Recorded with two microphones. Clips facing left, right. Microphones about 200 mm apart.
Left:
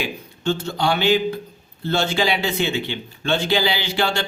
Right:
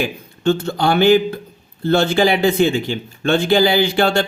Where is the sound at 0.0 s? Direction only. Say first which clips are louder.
Right 6 dB; 55° right (ahead or behind).